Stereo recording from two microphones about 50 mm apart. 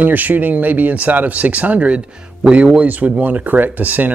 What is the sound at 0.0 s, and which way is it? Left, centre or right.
Speech, right.